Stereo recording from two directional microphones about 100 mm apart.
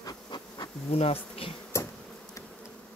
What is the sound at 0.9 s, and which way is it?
Bee, 75° left (ahead or behind).